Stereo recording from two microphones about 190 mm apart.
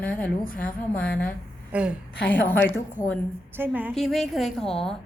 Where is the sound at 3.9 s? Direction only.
Centre (ahead or behind).